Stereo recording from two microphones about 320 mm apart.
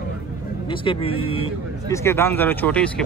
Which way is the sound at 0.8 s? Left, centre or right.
Centre.